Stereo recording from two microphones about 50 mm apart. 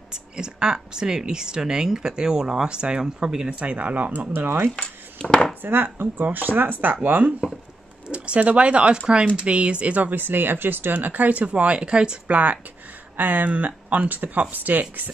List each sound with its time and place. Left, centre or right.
0.1 s speech: centre
3.4 s speech: right
4.3 s speech: right
4.7 s dishes: centre
5.6 s speech: right
10.1 s speech: right; by 12.4 s centre
13.2 s speech: right